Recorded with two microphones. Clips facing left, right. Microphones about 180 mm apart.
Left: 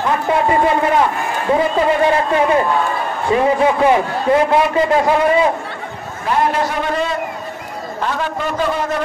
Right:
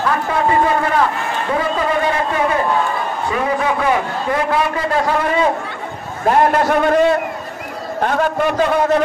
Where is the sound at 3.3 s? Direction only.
25° left (ahead or behind).